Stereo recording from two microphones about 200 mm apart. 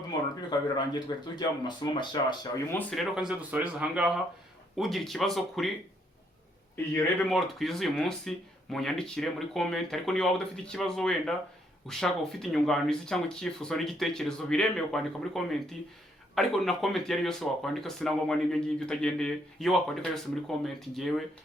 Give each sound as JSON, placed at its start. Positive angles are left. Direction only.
{"t": 0.9, "sound": "speech", "side_deg": 20}
{"t": 2.7, "sound": "speech", "side_deg": 0}
{"t": 6.9, "sound": "speech", "side_deg": 5}